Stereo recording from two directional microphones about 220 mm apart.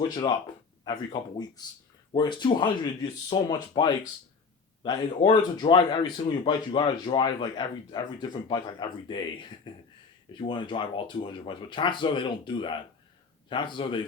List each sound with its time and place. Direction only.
0.9 s speech: 20° left (ahead or behind)